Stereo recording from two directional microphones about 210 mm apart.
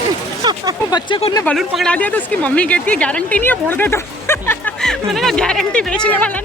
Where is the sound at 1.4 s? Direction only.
Centre (ahead or behind).